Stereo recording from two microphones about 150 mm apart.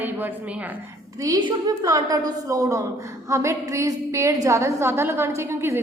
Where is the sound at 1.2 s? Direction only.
25° right (ahead or behind).